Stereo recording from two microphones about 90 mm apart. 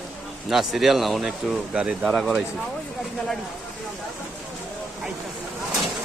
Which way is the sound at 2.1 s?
5° left (ahead or behind).